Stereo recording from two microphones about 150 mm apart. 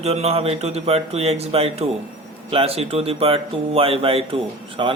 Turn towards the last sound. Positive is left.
turn(degrees=-35)  # may be behind; listen again after turning